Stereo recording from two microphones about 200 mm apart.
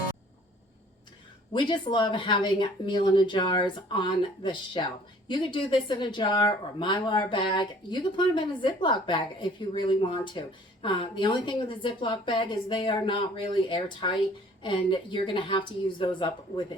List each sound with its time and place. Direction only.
1.5 s speech: 25° left (ahead or behind)